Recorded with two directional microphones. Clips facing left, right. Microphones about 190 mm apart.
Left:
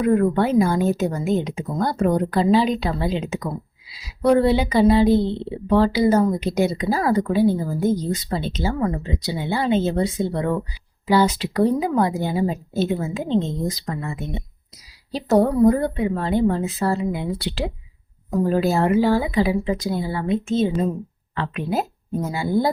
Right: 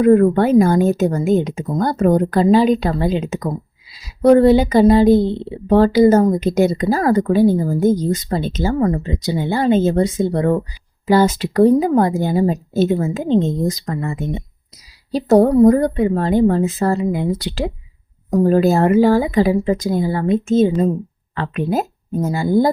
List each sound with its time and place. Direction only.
0.0 s a woman's voice: 50° right (ahead or behind)